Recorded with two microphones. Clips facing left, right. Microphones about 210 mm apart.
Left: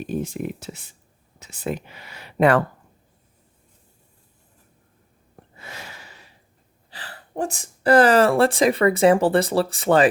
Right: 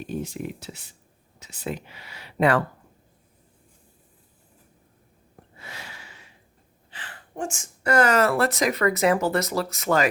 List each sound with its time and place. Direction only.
0.1 s speech: 50° left (ahead or behind)
5.6 s a sound: 45° left (ahead or behind)
6.9 s speech: 35° left (ahead or behind)